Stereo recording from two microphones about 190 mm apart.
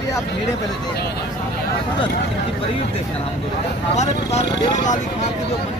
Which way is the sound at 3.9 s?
35° left (ahead or behind).